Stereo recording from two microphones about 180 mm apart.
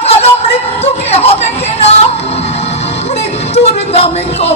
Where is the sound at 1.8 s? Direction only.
35° left (ahead or behind).